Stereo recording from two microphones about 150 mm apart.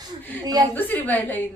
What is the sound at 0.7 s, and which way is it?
Speech, 10° left (ahead or behind).